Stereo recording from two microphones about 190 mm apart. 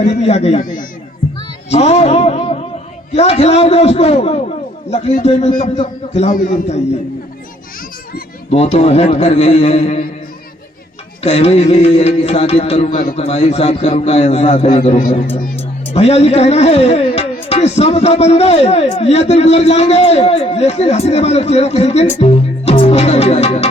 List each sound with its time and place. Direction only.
0.0 s speech: 35° left (ahead or behind)
0.6 s speech: 45° left (ahead or behind)
1.7 s a man's voice: 35° left (ahead or behind)
8.5 s speech: 35° left (ahead or behind)
11.2 s speech: 35° left (ahead or behind)
22.2 s music: 30° left (ahead or behind)